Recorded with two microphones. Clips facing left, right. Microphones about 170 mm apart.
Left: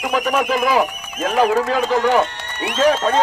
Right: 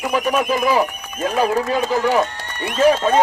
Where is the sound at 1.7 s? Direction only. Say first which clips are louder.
Left 1 dB; 10° right (ahead or behind).